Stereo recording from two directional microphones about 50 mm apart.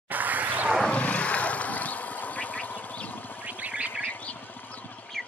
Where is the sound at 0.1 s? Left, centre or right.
Right.